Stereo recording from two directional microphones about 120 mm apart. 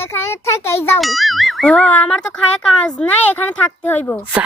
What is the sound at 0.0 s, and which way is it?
Speech, 20° left (ahead or behind).